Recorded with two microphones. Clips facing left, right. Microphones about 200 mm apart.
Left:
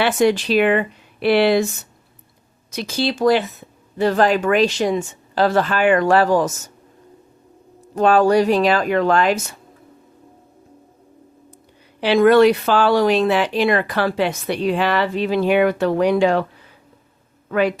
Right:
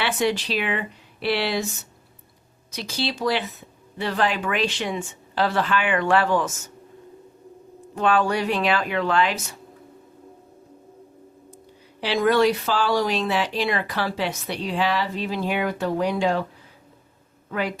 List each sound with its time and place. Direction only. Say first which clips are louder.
0.0 s speech: left 7 dB; 45° left (ahead or behind)
2.7 s a woman's voice: left 6 dB; 50° left (ahead or behind)
7.9 s a woman's voice: left 7 dB; 40° left (ahead or behind)
11.9 s a woman's voice: left 7 dB; 60° left (ahead or behind)
17.5 s speech: left 8 dB; 70° left (ahead or behind)